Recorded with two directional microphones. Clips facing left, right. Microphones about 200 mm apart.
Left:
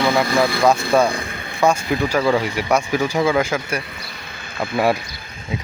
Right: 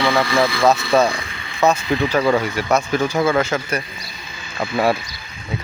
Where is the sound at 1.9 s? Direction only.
10° left (ahead or behind).